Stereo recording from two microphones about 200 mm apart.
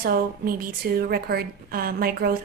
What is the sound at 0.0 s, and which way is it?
A woman's voice, 45° right (ahead or behind).